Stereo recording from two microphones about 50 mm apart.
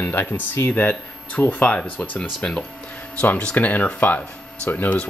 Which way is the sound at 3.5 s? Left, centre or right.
Left.